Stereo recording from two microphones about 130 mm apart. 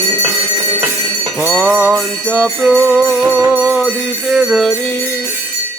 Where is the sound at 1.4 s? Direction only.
15° right (ahead or behind).